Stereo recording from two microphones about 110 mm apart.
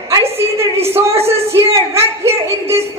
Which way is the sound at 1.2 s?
25° right (ahead or behind).